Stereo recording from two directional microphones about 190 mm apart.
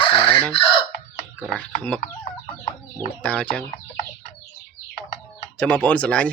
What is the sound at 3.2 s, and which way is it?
Speech, 5° left (ahead or behind).